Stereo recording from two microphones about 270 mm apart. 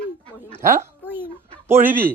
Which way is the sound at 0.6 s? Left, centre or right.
Centre.